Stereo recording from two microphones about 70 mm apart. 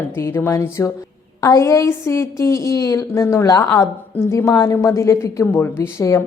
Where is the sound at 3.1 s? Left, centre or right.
Left.